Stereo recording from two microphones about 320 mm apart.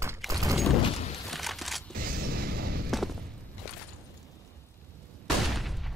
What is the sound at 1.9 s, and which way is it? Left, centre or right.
Music, right.